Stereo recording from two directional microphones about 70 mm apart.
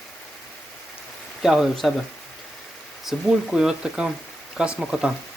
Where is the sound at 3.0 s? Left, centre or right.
Centre.